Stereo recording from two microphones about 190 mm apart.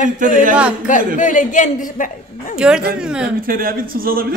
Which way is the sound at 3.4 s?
50° right (ahead or behind).